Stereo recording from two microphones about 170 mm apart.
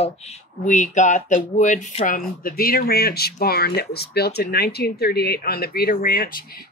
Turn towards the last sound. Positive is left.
turn(degrees=60)  # may be behind; listen again after turning